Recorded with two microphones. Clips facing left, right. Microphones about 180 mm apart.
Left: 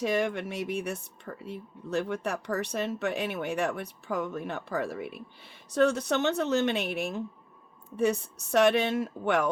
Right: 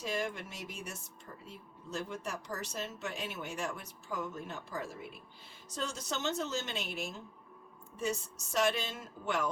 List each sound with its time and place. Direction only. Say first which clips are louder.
0.0 s speech: left 9 dB; 70° left (ahead or behind)